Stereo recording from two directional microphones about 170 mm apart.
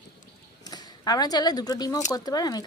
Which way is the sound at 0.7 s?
25° left (ahead or behind).